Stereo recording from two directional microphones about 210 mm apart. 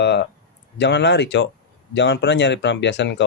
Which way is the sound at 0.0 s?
55° left (ahead or behind).